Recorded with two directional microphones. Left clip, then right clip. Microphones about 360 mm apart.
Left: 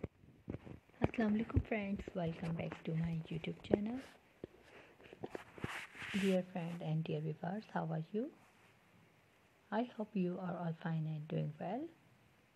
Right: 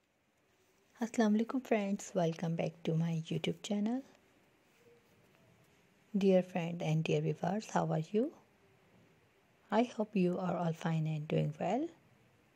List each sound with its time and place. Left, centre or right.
0.9 s speech: centre
6.3 s speech: right
9.7 s speech: right